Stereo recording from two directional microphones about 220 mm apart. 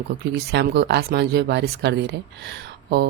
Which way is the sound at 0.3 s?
50° right (ahead or behind).